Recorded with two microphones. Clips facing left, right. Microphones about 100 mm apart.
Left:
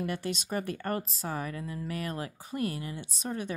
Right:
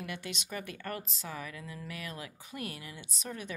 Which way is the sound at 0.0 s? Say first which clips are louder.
Left 7 dB; 40° left (ahead or behind).